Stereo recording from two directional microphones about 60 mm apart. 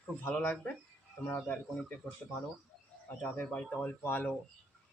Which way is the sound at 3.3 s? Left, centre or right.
Left.